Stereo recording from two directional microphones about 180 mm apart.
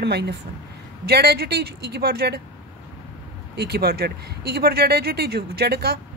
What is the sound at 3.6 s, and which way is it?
A woman's voice, 60° right (ahead or behind).